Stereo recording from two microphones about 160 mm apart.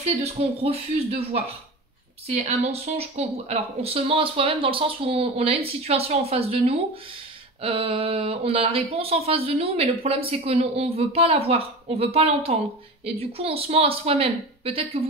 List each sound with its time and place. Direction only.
0.0 s speech: 40° right (ahead or behind)